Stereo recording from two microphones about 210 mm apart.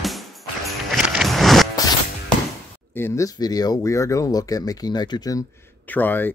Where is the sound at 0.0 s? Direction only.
Centre (ahead or behind).